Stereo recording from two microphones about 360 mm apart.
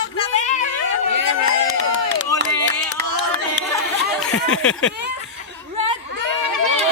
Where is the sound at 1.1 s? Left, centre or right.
Right.